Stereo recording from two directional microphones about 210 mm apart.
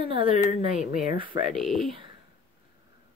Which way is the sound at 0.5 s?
35° left (ahead or behind).